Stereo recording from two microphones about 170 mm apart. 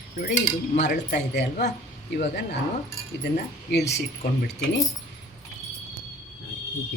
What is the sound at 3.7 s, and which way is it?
Speech, 80° left.